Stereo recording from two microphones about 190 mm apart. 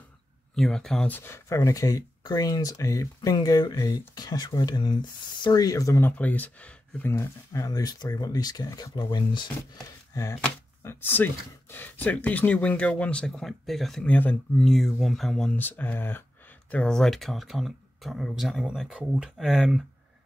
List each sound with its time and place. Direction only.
0.6 s speech: 5° left (ahead or behind)